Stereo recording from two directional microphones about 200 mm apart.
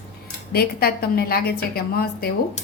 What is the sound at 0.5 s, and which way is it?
A woman's voice, 50° left (ahead or behind).